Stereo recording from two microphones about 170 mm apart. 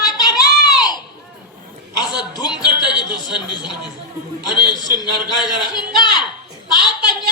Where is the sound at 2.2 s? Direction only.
25° left (ahead or behind).